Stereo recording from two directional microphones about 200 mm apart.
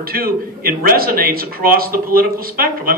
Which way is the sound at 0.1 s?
50° right (ahead or behind).